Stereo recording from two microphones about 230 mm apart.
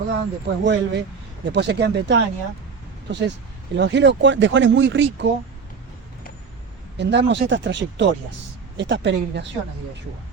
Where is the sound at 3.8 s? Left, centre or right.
Right.